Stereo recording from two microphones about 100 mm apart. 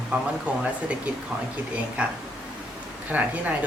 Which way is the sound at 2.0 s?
10° right (ahead or behind).